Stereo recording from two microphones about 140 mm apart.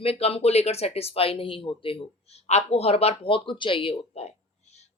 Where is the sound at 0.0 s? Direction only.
45° left (ahead or behind).